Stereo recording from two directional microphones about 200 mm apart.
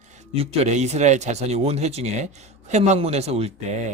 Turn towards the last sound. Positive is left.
turn(degrees=-35)  # may be behind; listen again after turning